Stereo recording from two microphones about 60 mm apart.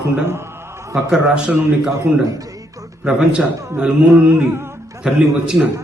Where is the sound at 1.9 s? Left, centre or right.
Right.